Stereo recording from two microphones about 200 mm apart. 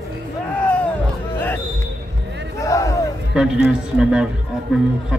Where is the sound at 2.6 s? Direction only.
15° left (ahead or behind).